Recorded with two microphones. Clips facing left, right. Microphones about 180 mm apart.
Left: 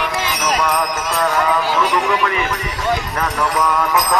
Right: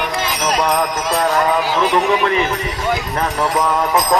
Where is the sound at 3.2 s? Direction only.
35° right (ahead or behind).